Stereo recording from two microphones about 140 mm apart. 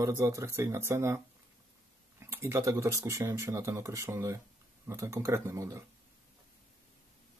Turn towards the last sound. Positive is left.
turn(degrees=-20)  # may be behind; listen again after turning